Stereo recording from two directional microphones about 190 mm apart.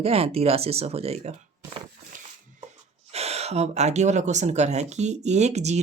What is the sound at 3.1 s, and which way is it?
Speech, 35° right (ahead or behind).